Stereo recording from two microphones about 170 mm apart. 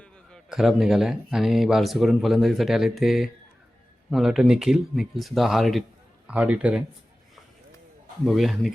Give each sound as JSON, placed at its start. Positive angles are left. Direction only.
{"t": 0.0, "sound": "a man's voice", "side_deg": 5}
{"t": 8.2, "sound": "a man's voice", "side_deg": 0}